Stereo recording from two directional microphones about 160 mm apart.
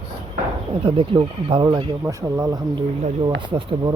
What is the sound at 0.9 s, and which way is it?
Speech, 35° right (ahead or behind).